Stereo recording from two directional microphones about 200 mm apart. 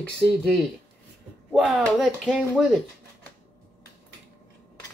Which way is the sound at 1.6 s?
Centre (ahead or behind).